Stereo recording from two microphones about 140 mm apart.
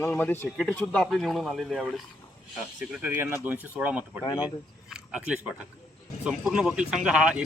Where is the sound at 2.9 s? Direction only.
15° right (ahead or behind).